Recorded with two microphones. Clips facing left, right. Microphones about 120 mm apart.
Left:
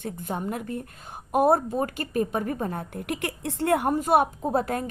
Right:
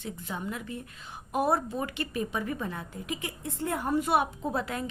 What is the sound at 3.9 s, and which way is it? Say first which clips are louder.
Speech: left 4 dB; 45° left (ahead or behind).